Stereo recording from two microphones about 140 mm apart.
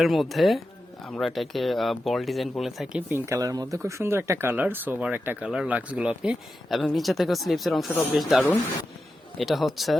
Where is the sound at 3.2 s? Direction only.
25° right (ahead or behind).